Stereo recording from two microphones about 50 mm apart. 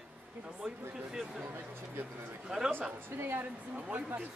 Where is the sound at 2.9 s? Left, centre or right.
Right.